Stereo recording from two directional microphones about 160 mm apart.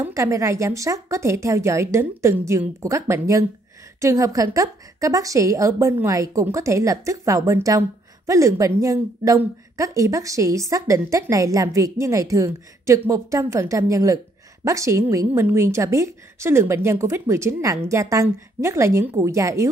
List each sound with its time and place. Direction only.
0.0 s a woman's voice: 20° right (ahead or behind)